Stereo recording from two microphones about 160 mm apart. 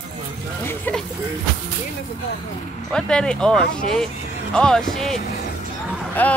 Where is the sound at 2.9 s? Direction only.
5° left (ahead or behind).